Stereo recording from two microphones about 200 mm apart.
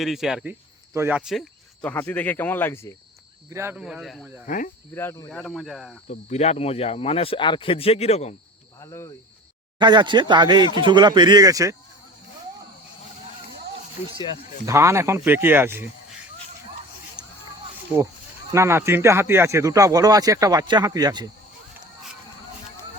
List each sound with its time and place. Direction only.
0.0 s speech: centre (ahead or behind)
3.5 s speech: 10° right (ahead or behind)
4.4 s speech: 40° left (ahead or behind)
4.9 s speech: 15° left (ahead or behind)
6.1 s speech: 35° left (ahead or behind)
8.8 s speech: 15° left (ahead or behind)
9.7 s speech: 20° right (ahead or behind)
14.7 s speech: 15° right (ahead or behind)
17.2 s a sound: 20° right (ahead or behind)
18.5 s speech: 15° right (ahead or behind)